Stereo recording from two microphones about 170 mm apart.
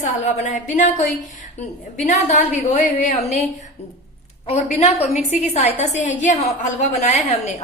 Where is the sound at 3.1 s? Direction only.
40° left (ahead or behind).